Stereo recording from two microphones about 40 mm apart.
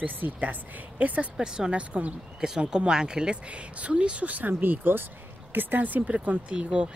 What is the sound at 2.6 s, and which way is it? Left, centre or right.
Speech, right.